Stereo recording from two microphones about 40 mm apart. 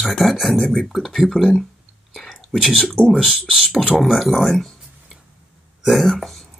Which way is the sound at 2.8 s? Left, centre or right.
Left.